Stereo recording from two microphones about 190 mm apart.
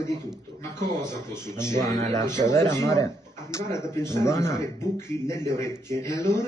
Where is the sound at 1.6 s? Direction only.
20° right (ahead or behind).